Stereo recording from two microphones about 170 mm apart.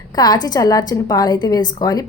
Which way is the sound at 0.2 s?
25° left (ahead or behind).